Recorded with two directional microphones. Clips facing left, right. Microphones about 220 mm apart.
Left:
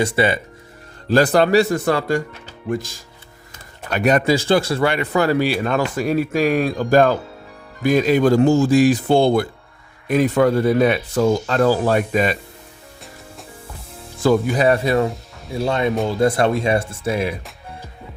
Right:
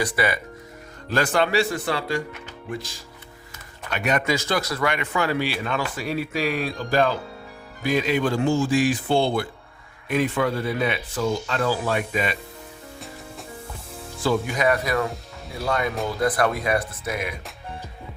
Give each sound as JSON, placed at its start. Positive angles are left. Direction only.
{"t": 0.0, "sound": "speech", "side_deg": 25}
{"t": 1.1, "sound": "speech", "side_deg": 35}
{"t": 14.3, "sound": "speech", "side_deg": 35}